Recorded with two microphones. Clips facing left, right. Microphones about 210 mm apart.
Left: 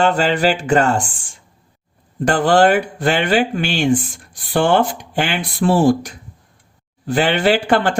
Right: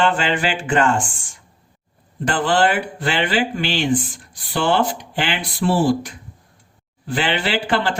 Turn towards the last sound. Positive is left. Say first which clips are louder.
# left 6 dB
turn(degrees=45)  # may be behind; listen again after turning